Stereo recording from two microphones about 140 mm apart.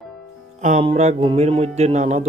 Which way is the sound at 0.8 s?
45° right (ahead or behind).